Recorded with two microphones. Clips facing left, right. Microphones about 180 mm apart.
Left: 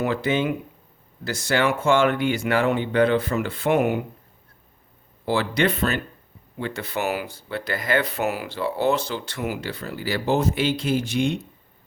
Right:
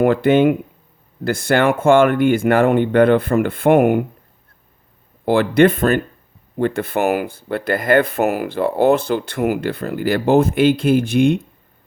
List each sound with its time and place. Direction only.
0.0 s speech: 55° right (ahead or behind)
5.2 s speech: 55° right (ahead or behind)